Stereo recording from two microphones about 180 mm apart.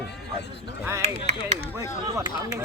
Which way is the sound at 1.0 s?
35° right (ahead or behind).